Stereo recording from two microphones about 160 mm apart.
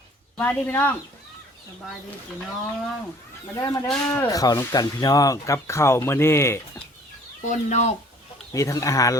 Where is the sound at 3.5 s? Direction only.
20° left (ahead or behind).